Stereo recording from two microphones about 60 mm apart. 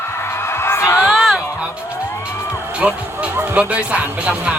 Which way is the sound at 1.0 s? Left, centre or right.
Centre.